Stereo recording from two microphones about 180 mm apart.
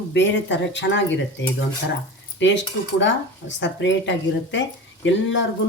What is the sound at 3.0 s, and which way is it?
Speech, 90° left.